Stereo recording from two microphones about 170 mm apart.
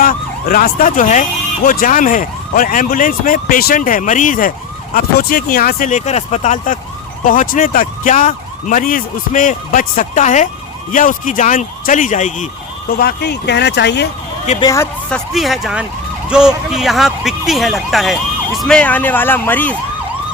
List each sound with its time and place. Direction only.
0.0 s emergency vehicle: 55° left (ahead or behind)
13.0 s speech: 70° left (ahead or behind); by 14.1 s 90° left
14.6 s speech: 20° left (ahead or behind)
15.1 s speech: centre (ahead or behind)